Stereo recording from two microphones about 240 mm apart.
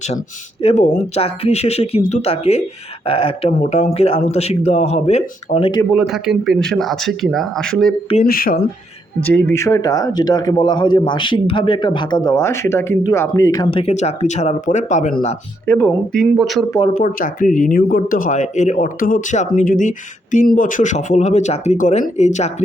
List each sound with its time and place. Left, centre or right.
0.6 s a man's voice: left
5.9 s speech: centre
8.1 s speech: left
9.2 s a man's voice: centre; by 15.4 s left
15.6 s speech: centre
16.9 s a man's voice: left